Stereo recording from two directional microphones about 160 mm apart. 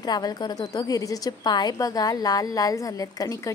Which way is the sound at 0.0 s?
25° left (ahead or behind).